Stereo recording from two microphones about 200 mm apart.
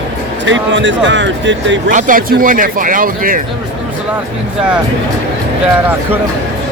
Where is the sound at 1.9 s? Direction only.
40° right (ahead or behind).